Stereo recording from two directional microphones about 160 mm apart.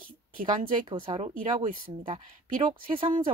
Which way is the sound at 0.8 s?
30° right (ahead or behind).